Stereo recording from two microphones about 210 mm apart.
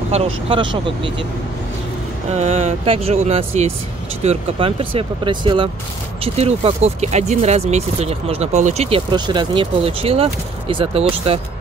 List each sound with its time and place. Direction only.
0.1 s speech: 25° right (ahead or behind)
2.2 s speech: 30° right (ahead or behind)